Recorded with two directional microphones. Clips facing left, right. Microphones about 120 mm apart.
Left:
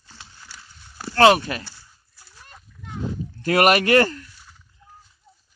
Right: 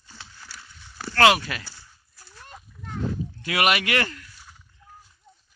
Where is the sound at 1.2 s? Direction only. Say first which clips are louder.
Left 4 dB; 30° left (ahead or behind).